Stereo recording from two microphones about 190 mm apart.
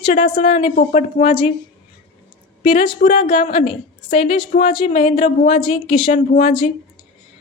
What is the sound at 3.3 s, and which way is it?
A woman's voice, 30° left (ahead or behind).